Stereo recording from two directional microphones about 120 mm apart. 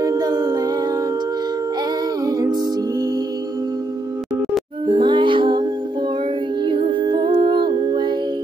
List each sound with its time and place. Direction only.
0.0 s a capella: 30° right (ahead or behind)
2.2 s music: 30° right (ahead or behind)
4.8 s music: 40° right (ahead or behind)